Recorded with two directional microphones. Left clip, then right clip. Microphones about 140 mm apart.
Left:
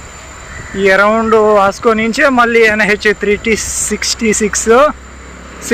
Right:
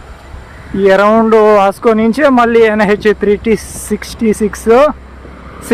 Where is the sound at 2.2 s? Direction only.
20° right (ahead or behind).